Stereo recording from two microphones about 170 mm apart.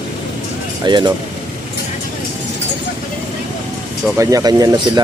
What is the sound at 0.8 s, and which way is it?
Speech, 25° right (ahead or behind).